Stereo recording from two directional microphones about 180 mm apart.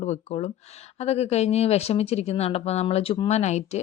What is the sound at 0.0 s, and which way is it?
Speech, 40° left (ahead or behind).